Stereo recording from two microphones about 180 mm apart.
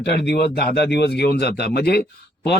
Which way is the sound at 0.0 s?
70° left (ahead or behind).